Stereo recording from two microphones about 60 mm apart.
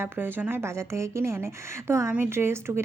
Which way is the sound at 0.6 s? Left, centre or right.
Right.